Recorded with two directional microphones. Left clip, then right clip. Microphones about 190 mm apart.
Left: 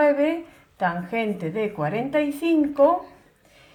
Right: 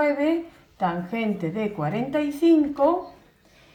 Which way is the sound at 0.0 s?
45° left (ahead or behind).